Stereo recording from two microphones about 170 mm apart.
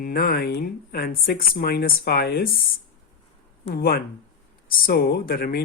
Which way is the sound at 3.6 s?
65° left (ahead or behind).